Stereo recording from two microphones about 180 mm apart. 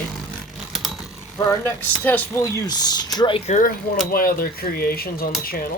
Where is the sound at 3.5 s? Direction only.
45° left (ahead or behind).